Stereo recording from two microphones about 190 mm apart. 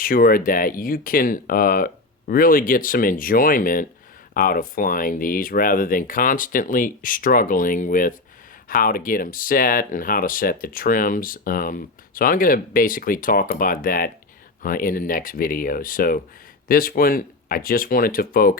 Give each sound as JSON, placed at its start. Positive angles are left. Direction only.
{"t": 0.0, "sound": "speech", "side_deg": 50}